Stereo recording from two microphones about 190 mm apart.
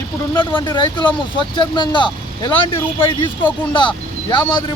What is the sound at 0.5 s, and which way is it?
Speech, 25° left (ahead or behind).